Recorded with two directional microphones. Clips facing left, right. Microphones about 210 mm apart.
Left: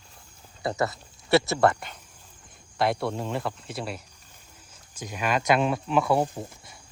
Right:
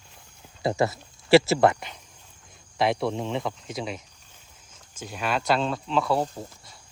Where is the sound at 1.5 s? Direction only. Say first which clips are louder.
Right 1 dB; centre (ahead or behind).